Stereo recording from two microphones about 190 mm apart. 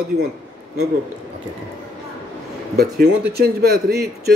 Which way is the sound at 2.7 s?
55° right (ahead or behind).